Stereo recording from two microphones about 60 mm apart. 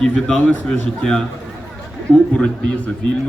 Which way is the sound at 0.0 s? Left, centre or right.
Centre.